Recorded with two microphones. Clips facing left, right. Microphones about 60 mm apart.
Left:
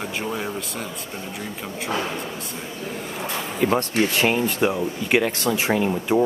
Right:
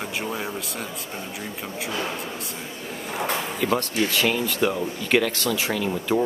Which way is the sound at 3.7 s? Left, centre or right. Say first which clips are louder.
Left 1 dB; left.